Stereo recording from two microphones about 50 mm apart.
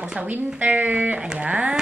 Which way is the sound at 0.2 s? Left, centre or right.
Right.